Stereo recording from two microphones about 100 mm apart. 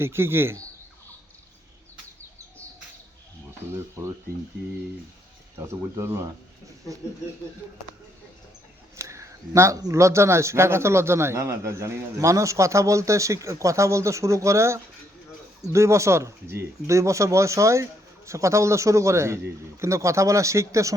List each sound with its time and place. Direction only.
0.0 s a man's voice: 25° right (ahead or behind)
5.5 s a man's voice: 25° right (ahead or behind)
9.0 s a man's voice: 30° right (ahead or behind)